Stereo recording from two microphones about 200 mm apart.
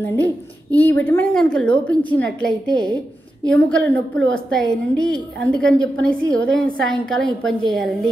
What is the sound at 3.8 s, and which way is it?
Speech, 65° right (ahead or behind).